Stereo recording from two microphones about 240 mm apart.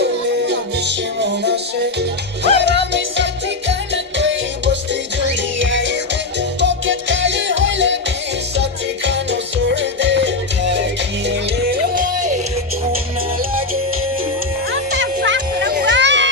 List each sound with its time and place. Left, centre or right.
0.0 s music: right
3.9 s music: right
9.0 s music: right
11.3 s music: right
14.7 s music: right